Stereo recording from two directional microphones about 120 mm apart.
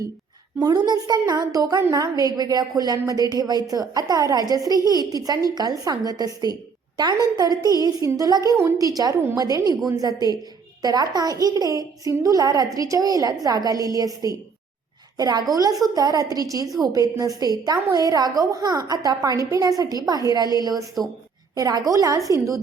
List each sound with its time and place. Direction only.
0.6 s a woman's voice: 35° right (ahead or behind)